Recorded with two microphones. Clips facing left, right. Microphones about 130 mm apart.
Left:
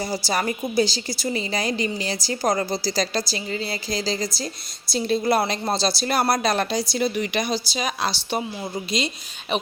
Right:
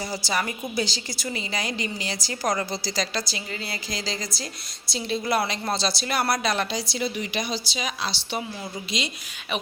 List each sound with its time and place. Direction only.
0.3 s a woman's voice: 40° left (ahead or behind)